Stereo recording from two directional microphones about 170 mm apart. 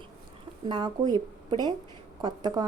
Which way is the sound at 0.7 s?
25° right (ahead or behind).